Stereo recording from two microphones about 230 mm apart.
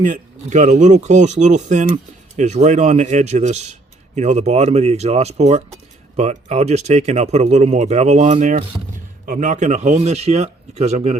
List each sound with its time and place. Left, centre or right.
0.0 s speech: right